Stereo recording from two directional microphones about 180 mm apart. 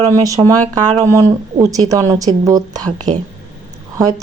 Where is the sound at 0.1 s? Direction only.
20° right (ahead or behind).